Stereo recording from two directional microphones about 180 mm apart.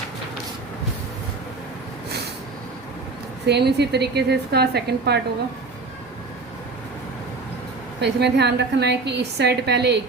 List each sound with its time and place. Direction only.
3.4 s a woman's voice: 65° right (ahead or behind)
8.0 s a woman's voice: 65° right (ahead or behind)